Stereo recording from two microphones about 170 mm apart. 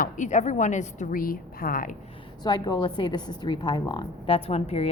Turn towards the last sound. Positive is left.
turn(degrees=35)  # may be behind; listen again after turning